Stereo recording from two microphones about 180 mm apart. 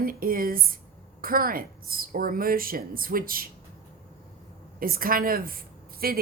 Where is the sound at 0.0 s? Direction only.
55° right (ahead or behind).